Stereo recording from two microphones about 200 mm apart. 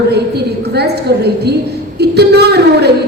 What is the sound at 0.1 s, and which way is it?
A woman's voice, 55° right (ahead or behind).